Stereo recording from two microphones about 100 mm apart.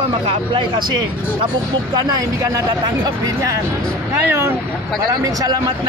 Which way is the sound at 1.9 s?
35° right (ahead or behind).